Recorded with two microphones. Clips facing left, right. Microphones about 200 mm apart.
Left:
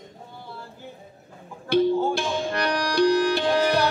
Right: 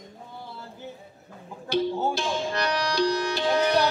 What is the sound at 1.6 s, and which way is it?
Speech, 55° left (ahead or behind).